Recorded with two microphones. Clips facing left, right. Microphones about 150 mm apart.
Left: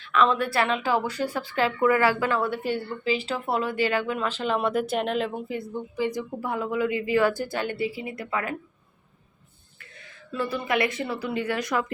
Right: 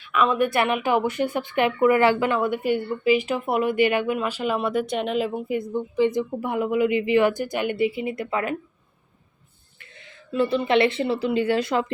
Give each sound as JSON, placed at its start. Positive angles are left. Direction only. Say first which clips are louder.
{"t": 0.0, "sound": "a woman's voice", "louder": "right 1 dB", "side_deg": -10}
{"t": 5.5, "sound": "speech", "louder": "right 6 dB", "side_deg": -20}
{"t": 10.0, "sound": "speech", "louder": "right 7 dB", "side_deg": -25}